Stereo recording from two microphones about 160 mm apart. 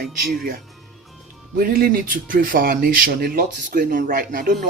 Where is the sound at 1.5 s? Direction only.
70° right (ahead or behind).